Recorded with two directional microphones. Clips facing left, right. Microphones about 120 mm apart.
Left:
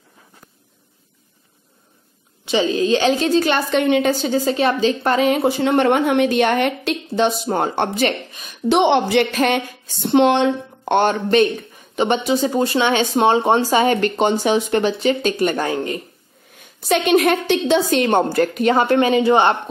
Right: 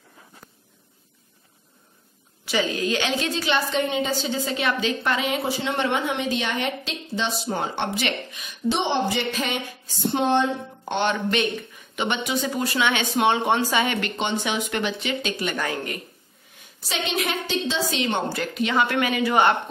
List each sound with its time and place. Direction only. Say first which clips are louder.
2.4 s a woman's voice: left 7 dB; 25° left (ahead or behind)
3.3 s a woman's voice: left 7 dB; 50° left (ahead or behind)
8.6 s speech: left 8 dB; 70° left (ahead or behind)
10.1 s speech: left 8 dB; 90° left
11.0 s speech: left 8 dB; 40° left (ahead or behind)
15.6 s a woman's voice: left 7 dB; 25° left (ahead or behind)
16.8 s a woman's voice: left 12 dB; 55° left (ahead or behind); by 19.5 s 30° left (ahead or behind)